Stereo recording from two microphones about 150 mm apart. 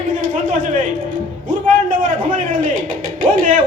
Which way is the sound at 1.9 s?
65° right (ahead or behind).